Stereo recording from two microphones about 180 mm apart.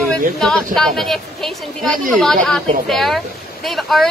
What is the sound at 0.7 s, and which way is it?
Speech, centre (ahead or behind).